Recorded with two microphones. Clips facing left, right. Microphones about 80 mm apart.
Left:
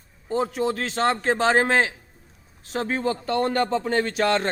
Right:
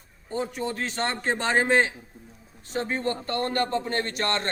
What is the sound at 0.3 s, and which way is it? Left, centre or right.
A man's voice, left.